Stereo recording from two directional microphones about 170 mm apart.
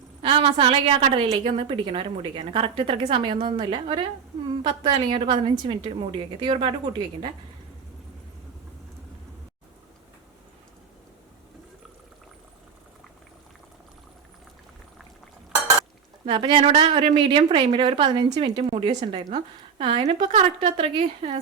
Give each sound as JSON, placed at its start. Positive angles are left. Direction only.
{"t": 0.2, "sound": "a woman's voice", "side_deg": -30}
{"t": 16.2, "sound": "a woman's voice", "side_deg": -30}